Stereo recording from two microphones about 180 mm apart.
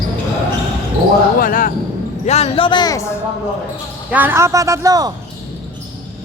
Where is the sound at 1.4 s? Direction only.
50° left (ahead or behind).